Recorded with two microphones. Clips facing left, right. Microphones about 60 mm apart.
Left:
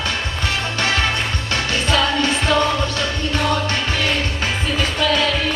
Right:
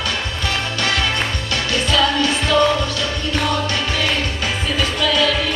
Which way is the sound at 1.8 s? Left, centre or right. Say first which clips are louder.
Right 1 dB; left.